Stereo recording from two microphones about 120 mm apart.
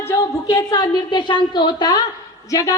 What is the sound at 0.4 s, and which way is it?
A woman's voice, 30° left (ahead or behind).